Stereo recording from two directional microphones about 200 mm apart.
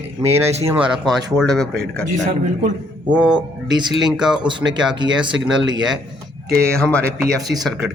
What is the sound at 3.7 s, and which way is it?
Speech, 20° right (ahead or behind).